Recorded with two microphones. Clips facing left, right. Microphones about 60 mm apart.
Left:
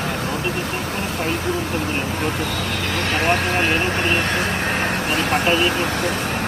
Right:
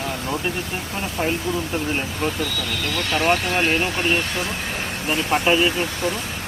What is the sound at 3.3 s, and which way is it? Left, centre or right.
Speech, left.